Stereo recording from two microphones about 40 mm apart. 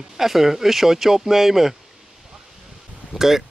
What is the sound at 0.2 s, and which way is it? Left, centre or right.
Speech, centre.